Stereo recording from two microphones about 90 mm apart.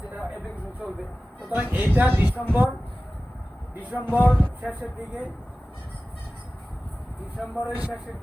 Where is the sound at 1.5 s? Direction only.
20° right (ahead or behind).